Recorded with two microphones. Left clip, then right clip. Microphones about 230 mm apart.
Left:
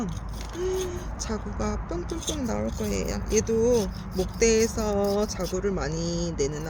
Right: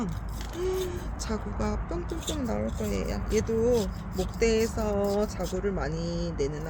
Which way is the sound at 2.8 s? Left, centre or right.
Left.